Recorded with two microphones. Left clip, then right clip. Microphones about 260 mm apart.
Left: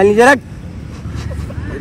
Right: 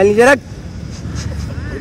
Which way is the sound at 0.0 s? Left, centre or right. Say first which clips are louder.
Left 1 dB; centre.